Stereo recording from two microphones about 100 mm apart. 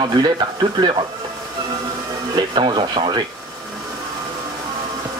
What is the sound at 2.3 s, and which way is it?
Speech, 50° right (ahead or behind).